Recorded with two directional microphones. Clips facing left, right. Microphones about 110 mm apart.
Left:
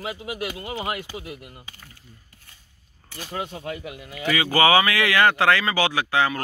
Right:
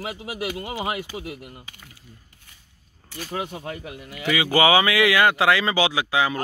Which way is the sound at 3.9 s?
20° left (ahead or behind).